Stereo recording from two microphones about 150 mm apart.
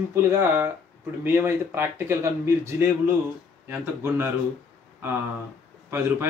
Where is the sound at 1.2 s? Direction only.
15° right (ahead or behind).